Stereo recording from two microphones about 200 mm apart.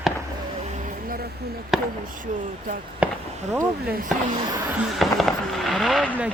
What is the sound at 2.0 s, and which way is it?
Speech, 40° right (ahead or behind).